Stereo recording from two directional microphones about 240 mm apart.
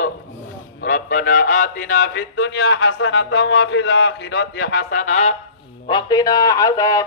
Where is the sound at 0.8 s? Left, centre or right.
Left.